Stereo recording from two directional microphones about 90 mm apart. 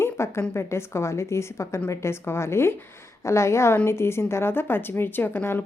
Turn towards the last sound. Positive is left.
turn(degrees=25)  # may be behind; listen again after turning